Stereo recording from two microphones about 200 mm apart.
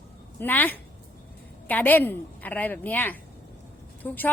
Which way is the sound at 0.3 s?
10° left (ahead or behind).